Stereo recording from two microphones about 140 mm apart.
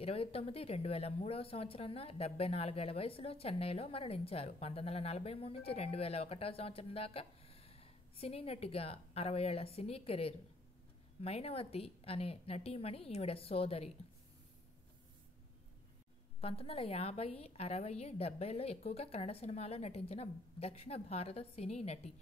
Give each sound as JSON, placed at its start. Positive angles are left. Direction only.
{"t": 0.0, "sound": "speech", "side_deg": 45}
{"t": 16.3, "sound": "speech", "side_deg": 45}